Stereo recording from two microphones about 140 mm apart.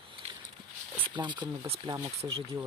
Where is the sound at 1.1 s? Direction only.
35° right (ahead or behind).